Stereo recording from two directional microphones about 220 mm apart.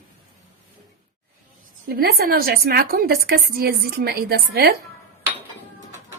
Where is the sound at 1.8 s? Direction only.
45° right (ahead or behind).